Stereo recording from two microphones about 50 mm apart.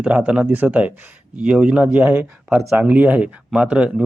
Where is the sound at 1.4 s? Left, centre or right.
Centre.